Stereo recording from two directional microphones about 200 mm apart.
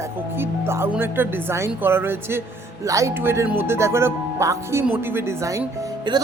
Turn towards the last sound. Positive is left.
turn(degrees=-20)  # may be behind; listen again after turning